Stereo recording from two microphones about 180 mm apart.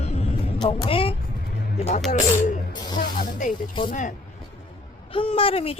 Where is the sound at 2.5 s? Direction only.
50° left (ahead or behind).